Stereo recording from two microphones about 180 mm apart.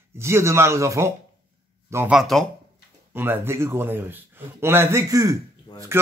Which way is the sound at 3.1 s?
10° right (ahead or behind).